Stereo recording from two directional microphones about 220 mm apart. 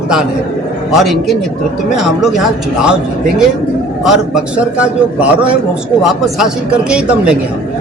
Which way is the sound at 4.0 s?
Centre (ahead or behind).